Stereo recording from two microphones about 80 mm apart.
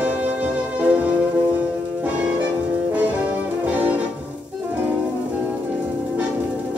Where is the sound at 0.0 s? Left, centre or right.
Centre.